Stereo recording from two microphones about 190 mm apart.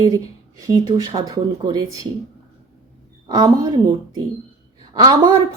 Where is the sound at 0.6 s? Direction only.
20° right (ahead or behind).